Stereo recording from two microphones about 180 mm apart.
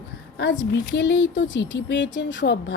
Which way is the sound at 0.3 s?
85° left.